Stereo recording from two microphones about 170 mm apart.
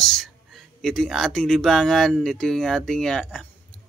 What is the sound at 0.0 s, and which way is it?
Speech, centre (ahead or behind).